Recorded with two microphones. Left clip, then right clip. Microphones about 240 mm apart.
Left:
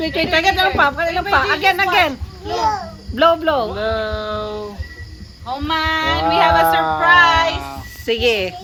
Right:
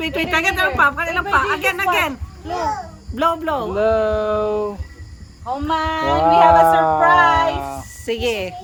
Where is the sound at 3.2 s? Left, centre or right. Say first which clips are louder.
Left 5 dB; centre.